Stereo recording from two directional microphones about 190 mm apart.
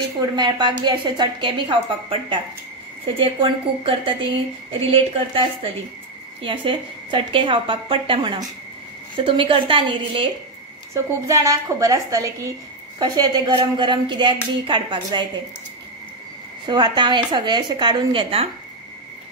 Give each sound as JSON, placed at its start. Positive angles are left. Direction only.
{"t": 0.4, "sound": "a woman's voice", "side_deg": -25}
{"t": 11.0, "sound": "a woman's voice", "side_deg": -15}
{"t": 16.6, "sound": "a woman's voice", "side_deg": -25}